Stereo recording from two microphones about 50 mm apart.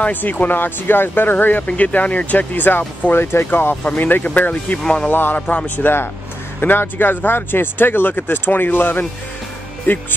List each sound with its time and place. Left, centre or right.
0.0 s speech: left
1.7 s speech: left
4.0 s speech: left